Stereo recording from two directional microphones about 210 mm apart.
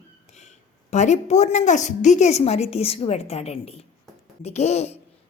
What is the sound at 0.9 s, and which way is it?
A woman's voice, 35° left (ahead or behind).